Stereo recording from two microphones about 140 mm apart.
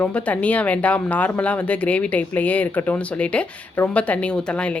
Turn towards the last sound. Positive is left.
turn(degrees=5)  # may be behind; listen again after turning